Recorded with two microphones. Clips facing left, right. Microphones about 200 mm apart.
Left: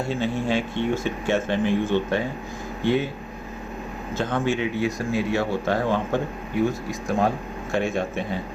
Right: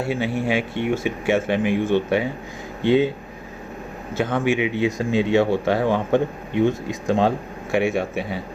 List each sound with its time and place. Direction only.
0.1 s speech: 10° right (ahead or behind)
4.2 s speech: 10° right (ahead or behind)
7.7 s speech: 10° right (ahead or behind)